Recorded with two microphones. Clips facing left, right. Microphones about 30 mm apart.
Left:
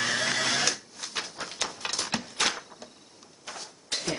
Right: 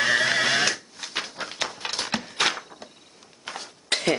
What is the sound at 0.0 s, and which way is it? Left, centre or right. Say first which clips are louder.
Neigh: right 6 dB; right.